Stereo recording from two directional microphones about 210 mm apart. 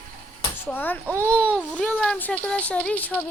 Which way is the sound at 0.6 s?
10° left (ahead or behind).